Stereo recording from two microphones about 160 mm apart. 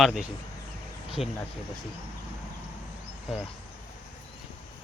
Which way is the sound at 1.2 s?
45° left (ahead or behind).